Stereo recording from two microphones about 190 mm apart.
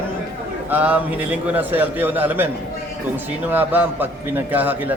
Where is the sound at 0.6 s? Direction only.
10° right (ahead or behind).